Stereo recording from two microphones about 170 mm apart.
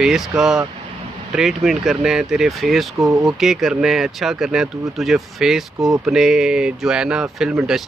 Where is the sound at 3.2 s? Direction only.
Centre (ahead or behind).